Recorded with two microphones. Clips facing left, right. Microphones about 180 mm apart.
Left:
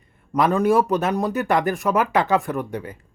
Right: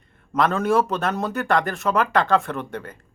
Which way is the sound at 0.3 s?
15° left (ahead or behind).